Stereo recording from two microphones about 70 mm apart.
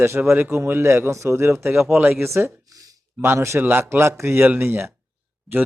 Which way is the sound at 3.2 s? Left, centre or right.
Right.